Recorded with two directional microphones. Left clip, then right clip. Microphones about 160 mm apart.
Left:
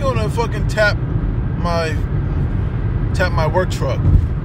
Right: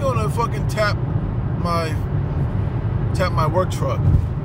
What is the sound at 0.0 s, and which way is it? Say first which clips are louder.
Vehicle: left 2 dB; 20° right (ahead or behind).